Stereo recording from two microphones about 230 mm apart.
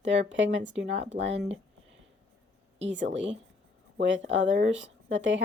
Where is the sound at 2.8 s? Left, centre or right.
Right.